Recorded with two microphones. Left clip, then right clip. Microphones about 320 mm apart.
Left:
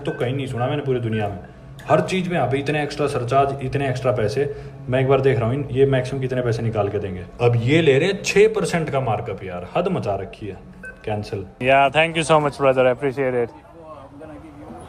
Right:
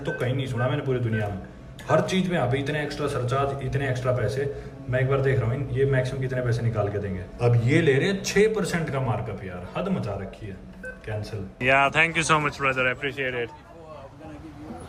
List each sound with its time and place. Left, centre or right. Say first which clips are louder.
0.0 s a man's voice: left 4 dB; centre
12.7 s a man's voice: left 7 dB; left